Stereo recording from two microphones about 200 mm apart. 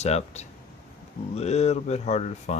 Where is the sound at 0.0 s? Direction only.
35° left (ahead or behind).